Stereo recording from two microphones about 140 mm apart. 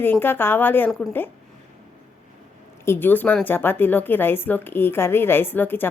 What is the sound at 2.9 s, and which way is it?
A woman's voice, 15° left (ahead or behind).